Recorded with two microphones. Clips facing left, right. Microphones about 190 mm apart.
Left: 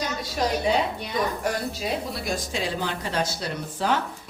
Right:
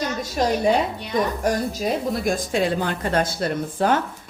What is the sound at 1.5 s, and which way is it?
A woman's voice, 50° right (ahead or behind).